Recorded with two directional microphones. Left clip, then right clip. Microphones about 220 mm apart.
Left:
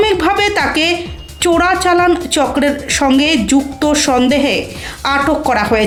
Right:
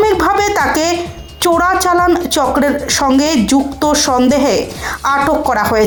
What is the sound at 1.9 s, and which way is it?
A woman's voice, centre (ahead or behind).